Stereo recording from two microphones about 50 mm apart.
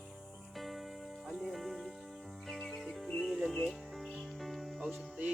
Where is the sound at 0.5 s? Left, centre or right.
Centre.